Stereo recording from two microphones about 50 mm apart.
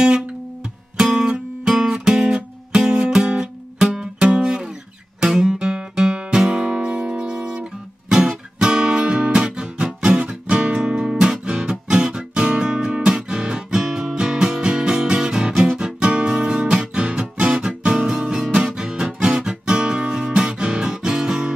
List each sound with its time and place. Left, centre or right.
1.0 s music: centre
5.2 s guitar: centre
6.3 s music: centre
15.8 s guitar: centre
16.9 s music: centre
17.6 s guitar: centre
18.8 s music: centre
19.0 s guitar: centre